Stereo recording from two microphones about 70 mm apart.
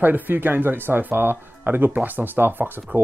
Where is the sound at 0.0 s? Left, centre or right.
Right.